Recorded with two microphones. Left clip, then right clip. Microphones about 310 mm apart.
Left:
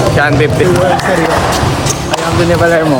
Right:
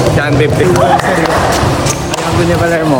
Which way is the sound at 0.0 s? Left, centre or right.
Centre.